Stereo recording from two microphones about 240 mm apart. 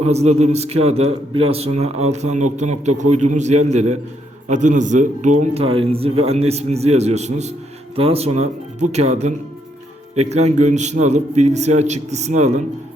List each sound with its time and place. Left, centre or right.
0.1 s a man's voice: right